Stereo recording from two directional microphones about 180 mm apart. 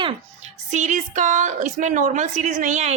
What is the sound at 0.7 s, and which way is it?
A woman's voice, 45° right (ahead or behind).